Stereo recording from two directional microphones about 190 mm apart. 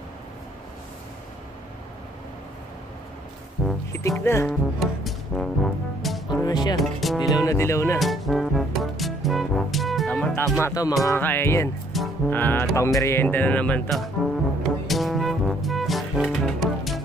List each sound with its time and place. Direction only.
3.6 s music: 5° left (ahead or behind)
4.2 s speech: 15° left (ahead or behind)
4.5 s music: centre (ahead or behind)
6.4 s speech: 20° left (ahead or behind)
6.8 s speech: centre (ahead or behind)
7.2 s speech: 20° left (ahead or behind)
8.0 s music: centre (ahead or behind)
10.6 s speech: 20° left (ahead or behind)
11.9 s music: centre (ahead or behind)
12.3 s speech: 10° left (ahead or behind)
14.9 s music: centre (ahead or behind)